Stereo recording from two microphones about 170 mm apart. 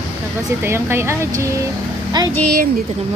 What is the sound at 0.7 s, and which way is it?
Speech, 15° right (ahead or behind).